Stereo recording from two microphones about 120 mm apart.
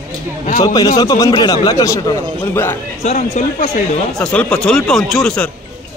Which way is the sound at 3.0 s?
75° left (ahead or behind).